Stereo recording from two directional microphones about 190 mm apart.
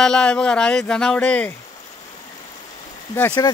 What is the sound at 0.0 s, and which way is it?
Speech, 5° left (ahead or behind).